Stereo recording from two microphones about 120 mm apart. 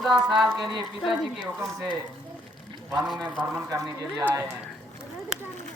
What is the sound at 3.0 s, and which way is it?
Speech, centre (ahead or behind).